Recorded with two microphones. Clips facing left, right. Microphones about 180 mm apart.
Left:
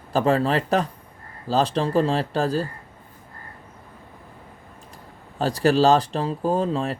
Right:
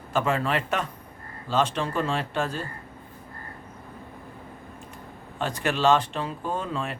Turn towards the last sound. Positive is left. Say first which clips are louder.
# left 7 dB
turn(degrees=35)  # may be behind; listen again after turning